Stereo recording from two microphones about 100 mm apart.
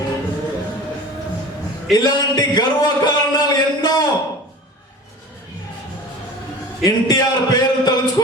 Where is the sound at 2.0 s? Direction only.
45° left (ahead or behind).